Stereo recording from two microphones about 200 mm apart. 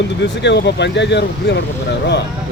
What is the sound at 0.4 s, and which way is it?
Speech, 60° left (ahead or behind).